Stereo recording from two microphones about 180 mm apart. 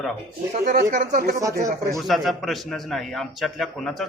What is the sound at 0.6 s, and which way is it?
Speech, 55° right (ahead or behind).